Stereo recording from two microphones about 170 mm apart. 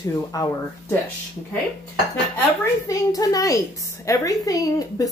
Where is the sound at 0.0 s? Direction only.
20° left (ahead or behind).